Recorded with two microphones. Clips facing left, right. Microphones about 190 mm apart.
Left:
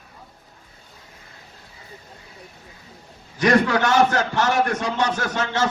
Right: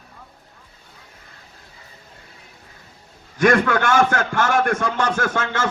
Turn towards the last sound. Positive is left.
turn(degrees=-50)  # may be behind; listen again after turning